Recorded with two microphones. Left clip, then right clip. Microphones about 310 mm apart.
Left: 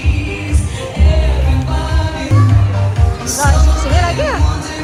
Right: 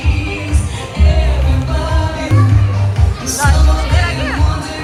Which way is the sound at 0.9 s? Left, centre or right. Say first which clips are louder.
Right 1 dB; centre.